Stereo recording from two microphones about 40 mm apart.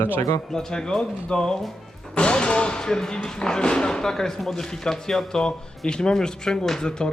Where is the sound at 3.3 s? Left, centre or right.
Centre.